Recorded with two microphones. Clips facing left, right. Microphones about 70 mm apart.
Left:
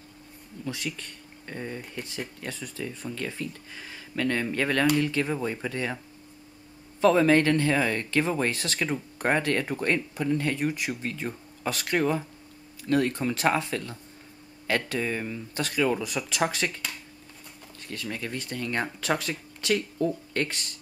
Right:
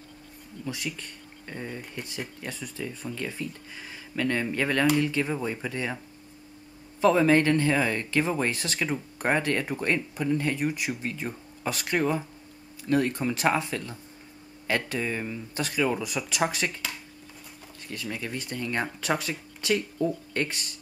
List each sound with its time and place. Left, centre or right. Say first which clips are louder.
1.5 s speech: left 1 dB; centre
7.0 s speech: even; centre